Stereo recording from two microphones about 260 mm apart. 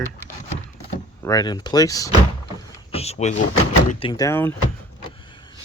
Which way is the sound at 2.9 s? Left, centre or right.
Left.